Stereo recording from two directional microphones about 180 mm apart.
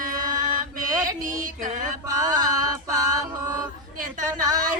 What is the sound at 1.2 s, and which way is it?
Music, 45° right (ahead or behind).